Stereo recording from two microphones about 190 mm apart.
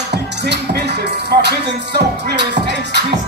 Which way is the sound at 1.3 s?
55° right (ahead or behind).